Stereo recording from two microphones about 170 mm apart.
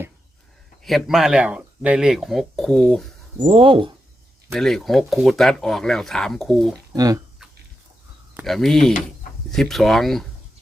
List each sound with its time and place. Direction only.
0.9 s speech: centre (ahead or behind)
3.4 s speech: 30° right (ahead or behind)
4.5 s speech: centre (ahead or behind)
6.9 s speech: 20° right (ahead or behind)
8.4 s speech: centre (ahead or behind)